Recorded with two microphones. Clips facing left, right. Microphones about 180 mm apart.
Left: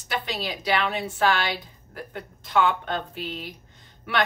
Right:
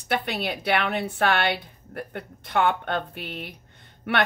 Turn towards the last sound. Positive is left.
turn(degrees=-60)  # may be behind; listen again after turning